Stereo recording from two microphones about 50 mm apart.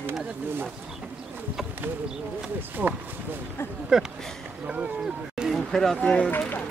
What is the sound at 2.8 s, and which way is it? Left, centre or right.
Speech, right.